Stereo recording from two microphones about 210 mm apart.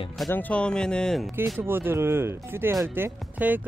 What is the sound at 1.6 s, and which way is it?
Speech, 10° right (ahead or behind).